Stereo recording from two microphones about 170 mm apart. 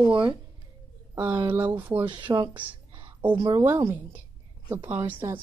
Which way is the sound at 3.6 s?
15° right (ahead or behind).